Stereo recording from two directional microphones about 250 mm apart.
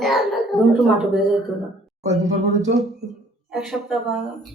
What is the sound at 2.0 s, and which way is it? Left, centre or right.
Speech, right.